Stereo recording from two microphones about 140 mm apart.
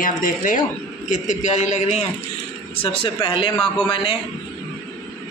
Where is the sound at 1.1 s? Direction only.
60° left (ahead or behind).